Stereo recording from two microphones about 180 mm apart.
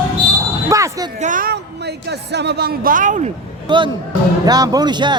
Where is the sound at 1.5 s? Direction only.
70° right (ahead or behind); by 3.3 s 45° right (ahead or behind).